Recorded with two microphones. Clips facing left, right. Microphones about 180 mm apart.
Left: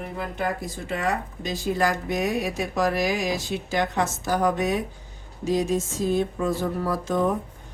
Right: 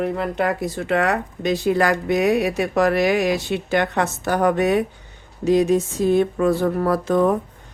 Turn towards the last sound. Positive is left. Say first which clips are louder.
# right 6 dB
turn(degrees=-65)  # may be behind; listen again after turning